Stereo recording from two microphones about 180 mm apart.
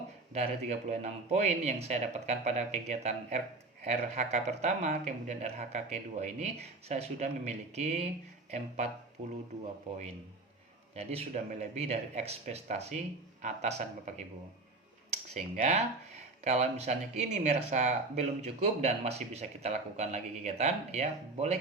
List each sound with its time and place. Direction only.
0.3 s speech: 40° right (ahead or behind)
15.3 s speech: 40° right (ahead or behind)